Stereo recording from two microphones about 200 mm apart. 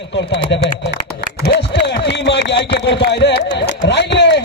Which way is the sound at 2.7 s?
60° left (ahead or behind).